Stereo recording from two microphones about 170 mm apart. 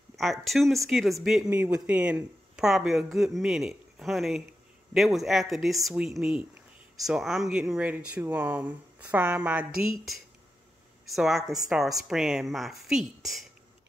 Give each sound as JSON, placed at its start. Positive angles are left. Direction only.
{"t": 0.1, "sound": "speech", "side_deg": 0}
{"t": 11.4, "sound": "a woman's voice", "side_deg": -20}
{"t": 11.7, "sound": "speech", "side_deg": 0}